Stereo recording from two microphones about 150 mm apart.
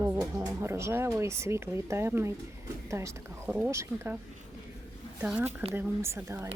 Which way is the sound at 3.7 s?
20° right (ahead or behind).